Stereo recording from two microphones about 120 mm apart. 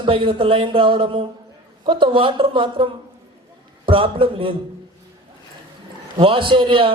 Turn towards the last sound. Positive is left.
turn(degrees=-45)  # may be behind; listen again after turning